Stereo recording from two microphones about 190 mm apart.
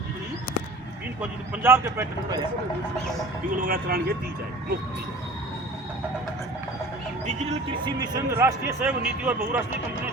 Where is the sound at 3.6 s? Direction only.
50° right (ahead or behind).